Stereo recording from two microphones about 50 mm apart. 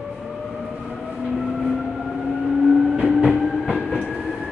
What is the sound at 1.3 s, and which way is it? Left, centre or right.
Vehicle, centre.